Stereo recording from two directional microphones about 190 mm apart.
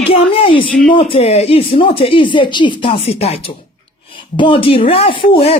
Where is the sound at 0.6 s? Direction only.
5° left (ahead or behind).